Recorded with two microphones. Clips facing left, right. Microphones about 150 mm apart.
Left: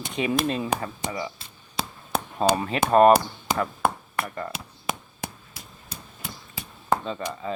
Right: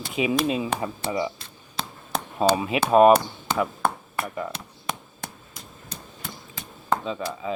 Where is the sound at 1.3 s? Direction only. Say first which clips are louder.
Left 2 dB; centre (ahead or behind).